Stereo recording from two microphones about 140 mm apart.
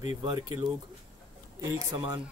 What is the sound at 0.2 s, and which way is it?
Speech, 30° right (ahead or behind).